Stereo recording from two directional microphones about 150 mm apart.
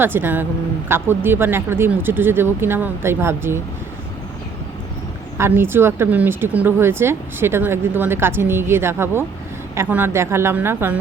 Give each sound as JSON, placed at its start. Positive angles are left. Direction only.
{"t": 0.0, "sound": "speech", "side_deg": -15}
{"t": 5.4, "sound": "speech", "side_deg": -15}